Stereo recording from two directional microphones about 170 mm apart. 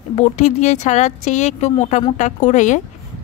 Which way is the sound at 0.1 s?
40° left (ahead or behind).